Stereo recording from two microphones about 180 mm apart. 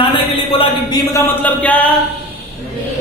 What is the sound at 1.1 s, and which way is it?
Speech, 10° left (ahead or behind).